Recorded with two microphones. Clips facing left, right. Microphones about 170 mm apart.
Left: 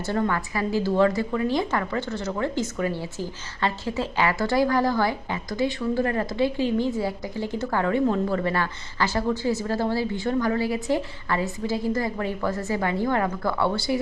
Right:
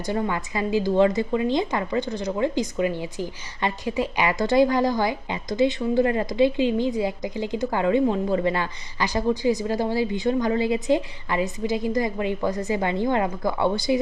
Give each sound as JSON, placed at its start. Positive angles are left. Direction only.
{"t": 0.0, "sound": "a woman's voice", "side_deg": -15}